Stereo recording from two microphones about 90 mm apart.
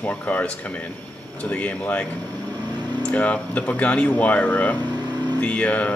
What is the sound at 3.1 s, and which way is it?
Speech, 15° left (ahead or behind).